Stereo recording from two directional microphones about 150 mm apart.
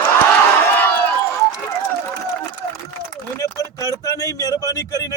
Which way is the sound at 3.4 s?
25° left (ahead or behind).